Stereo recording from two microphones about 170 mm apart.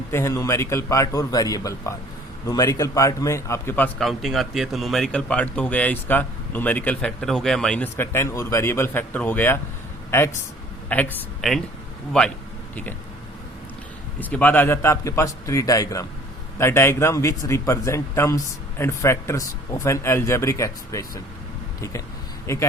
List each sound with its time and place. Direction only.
0.1 s a man's voice: 15° left (ahead or behind)
14.2 s a man's voice: 10° left (ahead or behind)